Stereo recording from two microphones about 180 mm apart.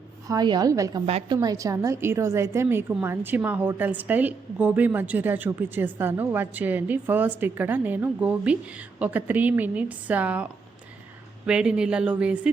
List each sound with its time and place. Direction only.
0.3 s a woman's voice: 25° right (ahead or behind)
1.0 s a woman's voice: 35° right (ahead or behind)
1.4 s a woman's voice: 20° right (ahead or behind)